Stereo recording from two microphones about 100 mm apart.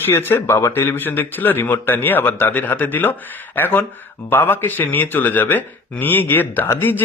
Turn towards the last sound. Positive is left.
turn(degrees=20)  # may be behind; listen again after turning